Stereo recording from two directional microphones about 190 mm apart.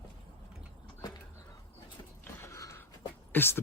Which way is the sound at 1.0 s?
20° left (ahead or behind).